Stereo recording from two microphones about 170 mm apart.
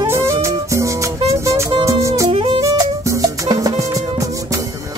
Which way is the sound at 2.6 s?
20° right (ahead or behind).